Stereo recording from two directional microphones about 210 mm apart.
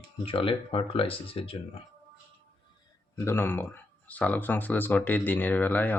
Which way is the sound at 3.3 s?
10° left (ahead or behind).